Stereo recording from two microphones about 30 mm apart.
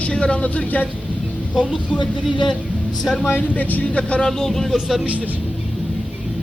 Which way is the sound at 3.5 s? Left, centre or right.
Left.